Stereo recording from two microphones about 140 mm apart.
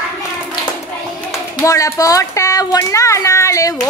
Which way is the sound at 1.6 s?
25° left (ahead or behind).